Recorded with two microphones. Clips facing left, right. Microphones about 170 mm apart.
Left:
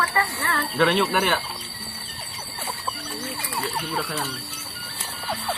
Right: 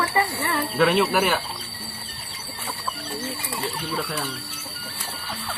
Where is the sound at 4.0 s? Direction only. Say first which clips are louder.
Right 1 dB; centre (ahead or behind).